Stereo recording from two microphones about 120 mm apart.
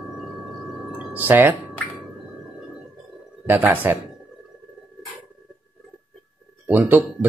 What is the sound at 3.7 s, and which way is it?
Speech, 15° right (ahead or behind).